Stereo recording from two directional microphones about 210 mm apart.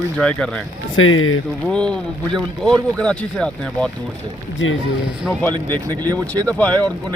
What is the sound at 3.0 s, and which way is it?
Speech, 5° left (ahead or behind).